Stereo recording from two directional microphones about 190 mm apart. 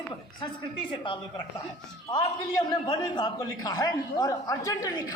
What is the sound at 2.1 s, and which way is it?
A man's voice, 25° left (ahead or behind).